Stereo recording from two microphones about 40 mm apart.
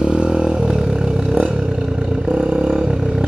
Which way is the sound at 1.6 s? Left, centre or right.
Centre.